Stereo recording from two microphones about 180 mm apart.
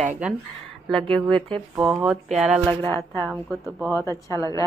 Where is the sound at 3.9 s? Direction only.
15° left (ahead or behind).